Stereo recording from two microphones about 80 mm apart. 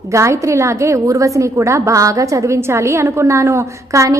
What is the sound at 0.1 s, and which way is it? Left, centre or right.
A woman's voice, right.